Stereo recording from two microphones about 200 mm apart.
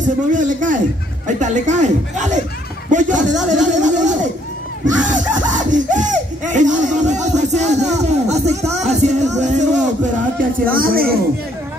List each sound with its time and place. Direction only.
0.0 s speech: 40° right (ahead or behind)
3.3 s speech: centre (ahead or behind)
3.6 s speech: 40° right (ahead or behind)